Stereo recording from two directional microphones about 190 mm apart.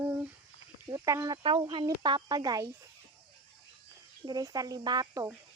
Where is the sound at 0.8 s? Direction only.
15° right (ahead or behind).